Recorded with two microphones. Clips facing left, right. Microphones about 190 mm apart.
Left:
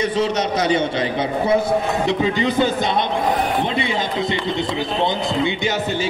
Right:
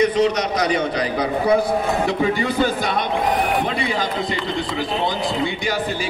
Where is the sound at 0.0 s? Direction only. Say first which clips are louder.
Right 2 dB; 30° left (ahead or behind).